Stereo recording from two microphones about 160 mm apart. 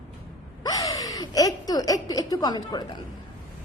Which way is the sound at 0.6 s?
20° left (ahead or behind).